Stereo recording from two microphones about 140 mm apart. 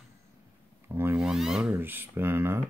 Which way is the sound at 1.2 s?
5° right (ahead or behind).